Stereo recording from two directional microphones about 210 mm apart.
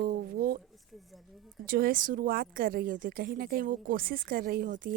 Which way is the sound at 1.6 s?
45° right (ahead or behind).